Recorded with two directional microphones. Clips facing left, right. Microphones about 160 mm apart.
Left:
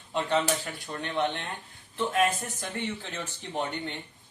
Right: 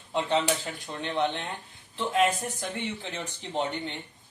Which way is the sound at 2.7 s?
15° right (ahead or behind).